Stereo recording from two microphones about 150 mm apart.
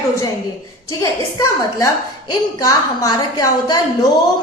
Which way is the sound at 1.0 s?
20° left (ahead or behind).